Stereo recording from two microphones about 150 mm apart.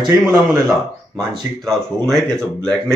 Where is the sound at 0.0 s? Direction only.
20° right (ahead or behind).